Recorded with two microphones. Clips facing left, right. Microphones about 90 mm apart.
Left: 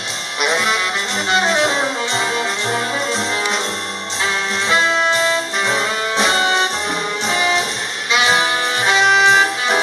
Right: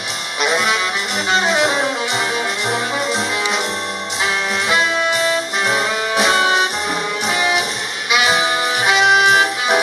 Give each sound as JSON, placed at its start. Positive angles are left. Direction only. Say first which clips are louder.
{"t": 0.4, "sound": "music", "louder": "right 1 dB", "side_deg": -5}
{"t": 5.7, "sound": "music", "louder": "right 2 dB", "side_deg": -10}
{"t": 8.8, "sound": "music", "louder": "even", "side_deg": -10}